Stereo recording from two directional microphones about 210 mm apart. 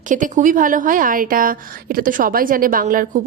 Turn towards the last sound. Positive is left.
turn(degrees=-40)  # may be behind; listen again after turning